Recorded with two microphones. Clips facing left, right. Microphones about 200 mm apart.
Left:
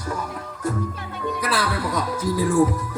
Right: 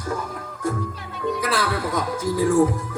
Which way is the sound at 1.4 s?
45° right (ahead or behind).